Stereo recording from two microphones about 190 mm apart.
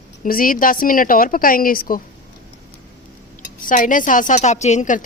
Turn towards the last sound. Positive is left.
turn(degrees=40)  # may be behind; listen again after turning